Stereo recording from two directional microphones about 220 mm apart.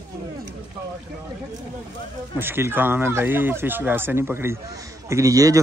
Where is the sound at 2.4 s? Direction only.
10° right (ahead or behind).